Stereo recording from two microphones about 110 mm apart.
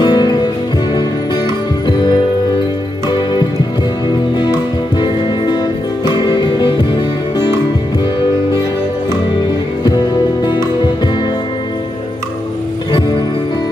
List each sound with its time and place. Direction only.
0.0 s music: 40° left (ahead or behind)
6.0 s music: 40° left (ahead or behind)
9.8 s music: 40° left (ahead or behind)